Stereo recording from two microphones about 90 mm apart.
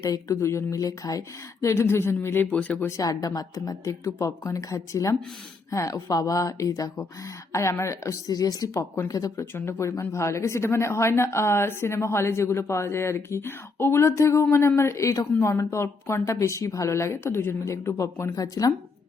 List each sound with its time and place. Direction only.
0.0 s speech: 35° left (ahead or behind); by 2.9 s 15° left (ahead or behind)
3.0 s speech: 40° left (ahead or behind)
18.3 s speech: 45° left (ahead or behind)